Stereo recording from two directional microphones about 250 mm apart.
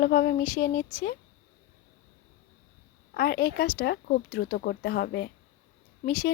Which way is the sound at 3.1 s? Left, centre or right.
Left.